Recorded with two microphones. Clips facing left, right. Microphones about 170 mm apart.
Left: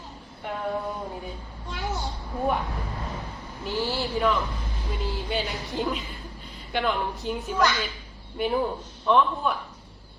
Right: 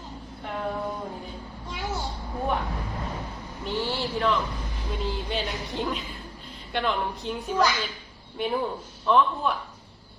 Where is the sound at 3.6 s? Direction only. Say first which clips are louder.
Left 1 dB; centre (ahead or behind).